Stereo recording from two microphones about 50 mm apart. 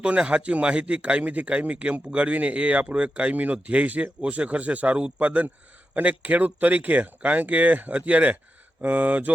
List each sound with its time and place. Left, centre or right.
0.0 s speech: right